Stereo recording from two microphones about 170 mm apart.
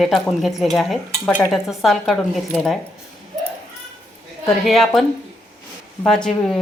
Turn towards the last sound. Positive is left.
turn(degrees=5)  # may be behind; listen again after turning